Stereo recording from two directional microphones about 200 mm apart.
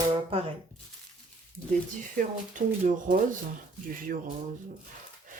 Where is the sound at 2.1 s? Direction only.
40° right (ahead or behind).